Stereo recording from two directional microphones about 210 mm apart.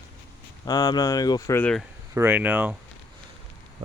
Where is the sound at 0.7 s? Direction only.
20° left (ahead or behind).